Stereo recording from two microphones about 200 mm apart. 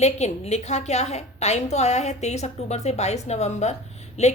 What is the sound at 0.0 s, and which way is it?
A woman's voice, 35° left (ahead or behind).